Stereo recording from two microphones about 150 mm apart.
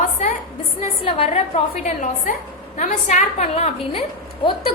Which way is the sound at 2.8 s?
55° left (ahead or behind).